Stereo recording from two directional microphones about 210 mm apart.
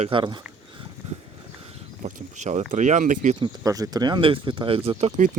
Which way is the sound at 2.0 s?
35° right (ahead or behind).